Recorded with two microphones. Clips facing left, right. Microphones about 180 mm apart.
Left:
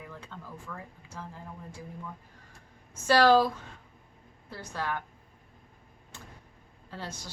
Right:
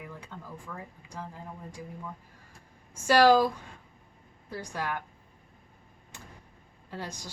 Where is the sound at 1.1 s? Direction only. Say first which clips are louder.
Right 2 dB; 15° right (ahead or behind).